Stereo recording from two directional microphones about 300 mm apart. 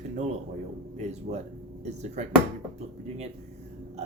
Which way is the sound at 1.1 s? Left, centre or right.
Right.